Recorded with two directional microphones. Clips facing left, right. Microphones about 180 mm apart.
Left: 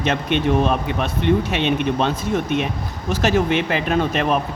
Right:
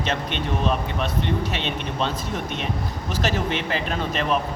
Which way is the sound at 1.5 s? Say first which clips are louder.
Left 8 dB; 55° left (ahead or behind).